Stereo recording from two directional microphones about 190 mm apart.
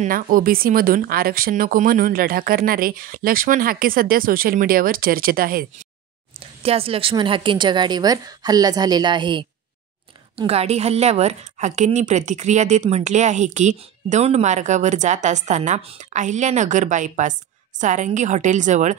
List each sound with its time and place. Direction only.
0.0 s a woman's voice: 45° right (ahead or behind)
6.6 s a woman's voice: 30° right (ahead or behind)